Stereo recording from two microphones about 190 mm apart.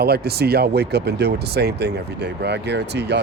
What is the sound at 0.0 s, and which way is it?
Speech, 55° right (ahead or behind).